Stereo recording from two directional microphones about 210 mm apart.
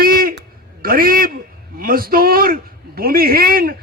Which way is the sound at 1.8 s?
45° right (ahead or behind).